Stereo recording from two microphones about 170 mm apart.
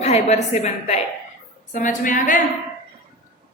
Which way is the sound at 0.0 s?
40° left (ahead or behind).